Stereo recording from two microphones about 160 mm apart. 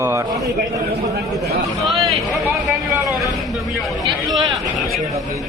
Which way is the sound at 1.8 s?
Centre (ahead or behind).